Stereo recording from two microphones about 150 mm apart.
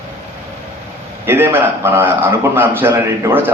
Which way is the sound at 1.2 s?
15° right (ahead or behind).